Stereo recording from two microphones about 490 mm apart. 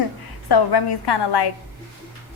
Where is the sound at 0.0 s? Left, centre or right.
Left.